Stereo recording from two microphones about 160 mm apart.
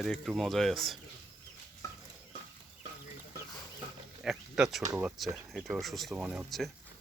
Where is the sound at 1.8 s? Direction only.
20° left (ahead or behind).